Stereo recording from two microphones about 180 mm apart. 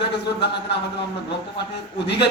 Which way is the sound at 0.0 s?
70° left (ahead or behind).